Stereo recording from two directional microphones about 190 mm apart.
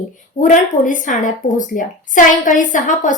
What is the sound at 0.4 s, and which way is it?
A woman's voice, 45° left (ahead or behind).